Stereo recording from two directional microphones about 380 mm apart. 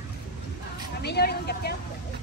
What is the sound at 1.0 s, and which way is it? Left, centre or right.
Vehicle, left.